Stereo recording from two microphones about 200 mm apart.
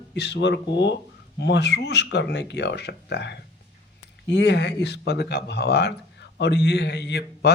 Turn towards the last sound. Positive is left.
turn(degrees=55)  # may be behind; listen again after turning